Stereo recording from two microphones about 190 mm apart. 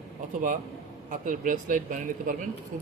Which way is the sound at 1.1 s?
45° right (ahead or behind).